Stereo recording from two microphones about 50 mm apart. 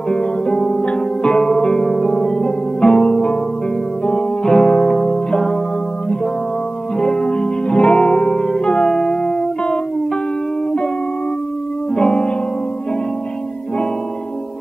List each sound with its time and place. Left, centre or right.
0.1 s music: centre
7.0 s music: centre
11.9 s music: centre